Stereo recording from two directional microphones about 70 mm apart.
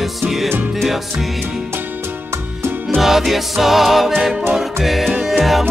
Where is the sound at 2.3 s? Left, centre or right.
Right.